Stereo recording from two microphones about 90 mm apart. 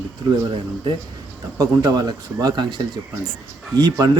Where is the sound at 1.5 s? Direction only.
45° right (ahead or behind).